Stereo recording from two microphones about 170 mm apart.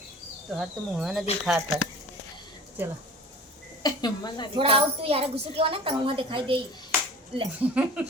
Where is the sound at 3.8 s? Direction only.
25° left (ahead or behind).